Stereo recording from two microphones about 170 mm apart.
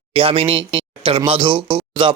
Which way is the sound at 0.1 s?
30° right (ahead or behind).